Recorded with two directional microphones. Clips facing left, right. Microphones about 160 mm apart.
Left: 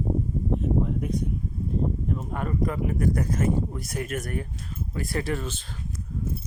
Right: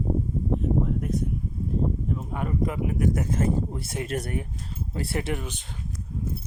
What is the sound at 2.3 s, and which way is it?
Speech, 15° right (ahead or behind).